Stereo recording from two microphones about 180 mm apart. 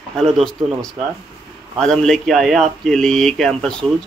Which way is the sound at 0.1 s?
5° left (ahead or behind).